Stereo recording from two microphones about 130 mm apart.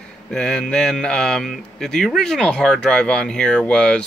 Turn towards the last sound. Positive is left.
turn(degrees=5)  # may be behind; listen again after turning